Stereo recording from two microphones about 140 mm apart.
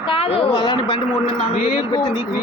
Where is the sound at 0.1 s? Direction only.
40° left (ahead or behind).